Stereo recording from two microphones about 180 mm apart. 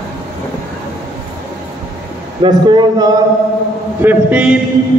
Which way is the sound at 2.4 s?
25° right (ahead or behind).